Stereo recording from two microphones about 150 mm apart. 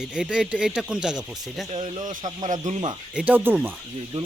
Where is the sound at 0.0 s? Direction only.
5° right (ahead or behind).